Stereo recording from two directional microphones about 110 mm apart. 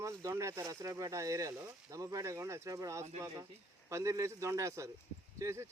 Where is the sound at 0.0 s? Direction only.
30° right (ahead or behind).